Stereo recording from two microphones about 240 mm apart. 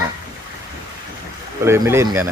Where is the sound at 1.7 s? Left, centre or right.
Centre.